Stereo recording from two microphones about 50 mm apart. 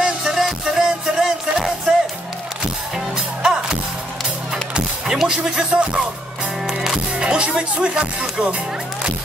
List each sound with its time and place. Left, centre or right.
0.0 s music: centre
4.7 s music: centre
7.2 s speech: right